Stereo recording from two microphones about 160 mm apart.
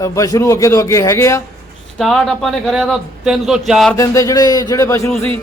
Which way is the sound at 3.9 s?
20° left (ahead or behind).